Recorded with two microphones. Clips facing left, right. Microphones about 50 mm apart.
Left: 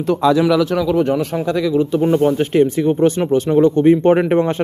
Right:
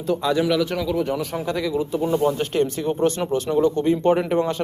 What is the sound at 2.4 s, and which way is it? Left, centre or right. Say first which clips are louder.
Speech: left 7 dB; left.